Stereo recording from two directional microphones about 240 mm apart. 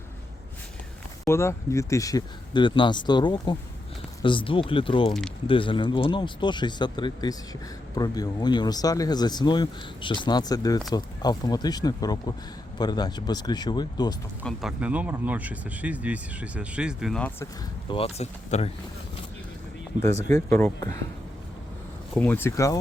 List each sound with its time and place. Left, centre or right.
1.2 s speech: centre
14.4 s speech: centre
17.8 s speech: left
20.0 s speech: centre
22.1 s speech: centre